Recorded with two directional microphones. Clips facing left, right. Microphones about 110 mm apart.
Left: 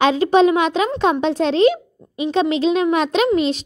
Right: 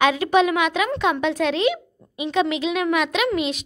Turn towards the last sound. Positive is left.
turn(degrees=35)  # may be behind; listen again after turning